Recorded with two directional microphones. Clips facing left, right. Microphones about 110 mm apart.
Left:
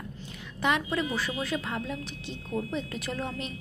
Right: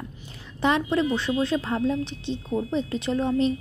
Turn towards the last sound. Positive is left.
turn(degrees=-30)  # may be behind; listen again after turning